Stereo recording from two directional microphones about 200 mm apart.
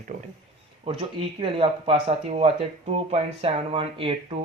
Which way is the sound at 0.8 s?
30° right (ahead or behind).